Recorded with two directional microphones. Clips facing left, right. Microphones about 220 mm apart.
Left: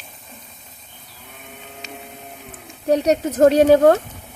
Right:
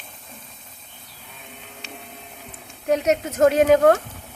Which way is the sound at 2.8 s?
35° left (ahead or behind).